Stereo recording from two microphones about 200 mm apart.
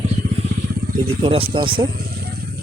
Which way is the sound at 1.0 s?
30° right (ahead or behind).